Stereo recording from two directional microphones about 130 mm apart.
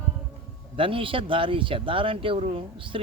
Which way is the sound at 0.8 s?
45° right (ahead or behind).